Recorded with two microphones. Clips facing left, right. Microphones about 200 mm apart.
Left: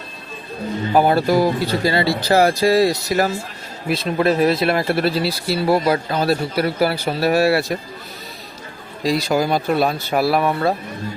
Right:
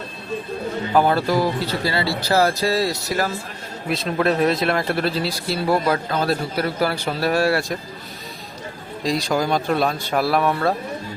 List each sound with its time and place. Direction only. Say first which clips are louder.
0.9 s speech: left 3 dB; 15° left (ahead or behind)
3.8 s speech: left 2 dB; 5° left (ahead or behind)
9.0 s speech: left 3 dB; 5° left (ahead or behind)